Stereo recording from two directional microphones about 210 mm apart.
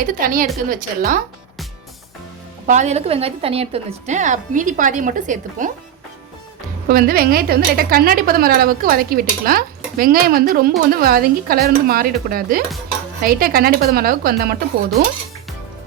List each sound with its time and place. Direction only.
0.0 s a woman's voice: 40° right (ahead or behind)
2.6 s a woman's voice: 35° right (ahead or behind)
6.8 s a woman's voice: 45° right (ahead or behind)